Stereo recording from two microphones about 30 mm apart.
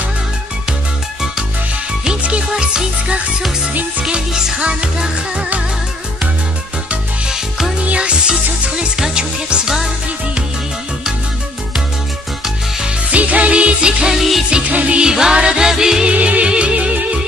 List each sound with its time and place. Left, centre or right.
2.6 s music: right
4.3 s music: right
7.2 s music: centre
8.0 s music: right
8.9 s music: right
13.1 s music: right
14.1 s music: centre
14.7 s music: right
15.0 s music: right
16.1 s music: right